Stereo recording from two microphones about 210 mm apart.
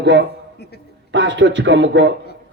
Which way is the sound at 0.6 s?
50° left (ahead or behind).